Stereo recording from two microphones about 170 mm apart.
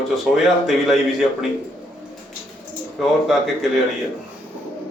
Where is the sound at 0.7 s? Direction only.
Centre (ahead or behind).